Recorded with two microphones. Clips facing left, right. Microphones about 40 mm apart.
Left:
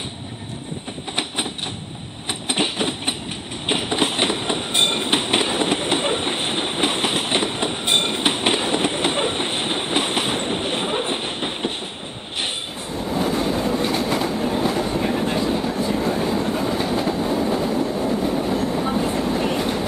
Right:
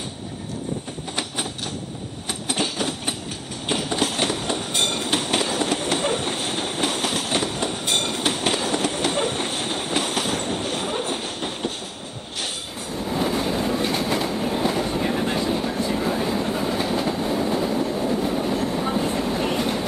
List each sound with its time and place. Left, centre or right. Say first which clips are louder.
1.1 s a sound: left 3 dB; left
2.4 s train: left 3 dB; left
12.9 s train: left 1 dB; centre